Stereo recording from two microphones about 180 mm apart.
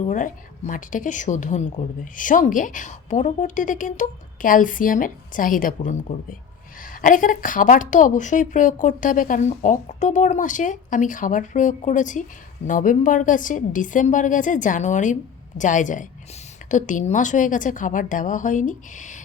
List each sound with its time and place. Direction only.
0.1 s a woman's voice: 45° left (ahead or behind)